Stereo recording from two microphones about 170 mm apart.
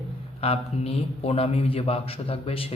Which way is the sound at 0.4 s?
35° left (ahead or behind).